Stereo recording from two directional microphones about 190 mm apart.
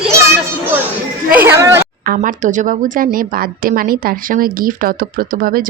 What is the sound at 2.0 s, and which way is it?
A woman's voice, 45° right (ahead or behind).